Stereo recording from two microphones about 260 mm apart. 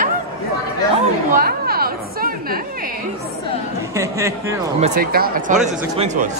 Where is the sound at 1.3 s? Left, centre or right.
Right.